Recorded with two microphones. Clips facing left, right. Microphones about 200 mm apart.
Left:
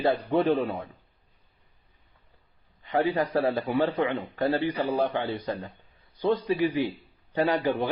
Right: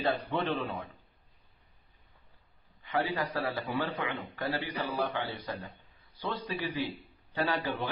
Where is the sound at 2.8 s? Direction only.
20° left (ahead or behind).